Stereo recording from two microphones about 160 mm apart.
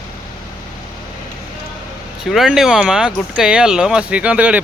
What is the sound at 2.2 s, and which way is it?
Speech, centre (ahead or behind).